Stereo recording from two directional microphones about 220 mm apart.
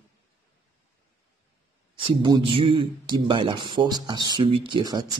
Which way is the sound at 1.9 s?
25° right (ahead or behind).